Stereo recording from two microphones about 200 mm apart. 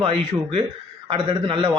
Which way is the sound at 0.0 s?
30° right (ahead or behind).